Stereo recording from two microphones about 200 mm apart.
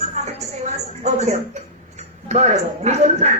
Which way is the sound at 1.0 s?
35° right (ahead or behind).